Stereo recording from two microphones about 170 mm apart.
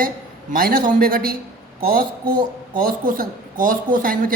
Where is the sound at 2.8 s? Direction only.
55° right (ahead or behind).